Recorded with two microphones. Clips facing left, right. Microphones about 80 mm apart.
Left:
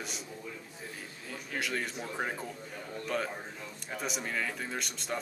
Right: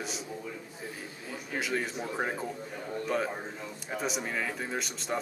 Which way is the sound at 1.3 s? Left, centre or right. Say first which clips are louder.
Right 3 dB; centre.